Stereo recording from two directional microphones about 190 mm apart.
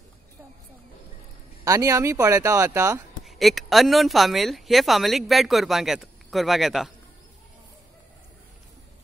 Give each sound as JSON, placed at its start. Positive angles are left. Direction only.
{"t": 1.6, "sound": "speech", "side_deg": -20}
{"t": 3.3, "sound": "speech", "side_deg": 0}